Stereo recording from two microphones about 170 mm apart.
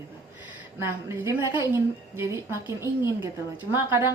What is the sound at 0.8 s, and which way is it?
Music, 15° right (ahead or behind).